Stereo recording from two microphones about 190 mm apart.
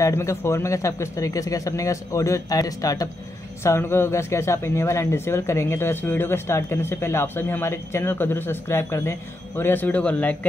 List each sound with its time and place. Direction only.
0.0 s speech: 15° left (ahead or behind)